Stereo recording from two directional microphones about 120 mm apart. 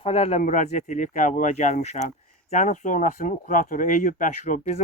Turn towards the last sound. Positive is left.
turn(degrees=90)